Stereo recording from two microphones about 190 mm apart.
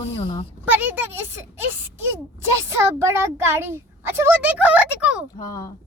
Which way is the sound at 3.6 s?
10° right (ahead or behind).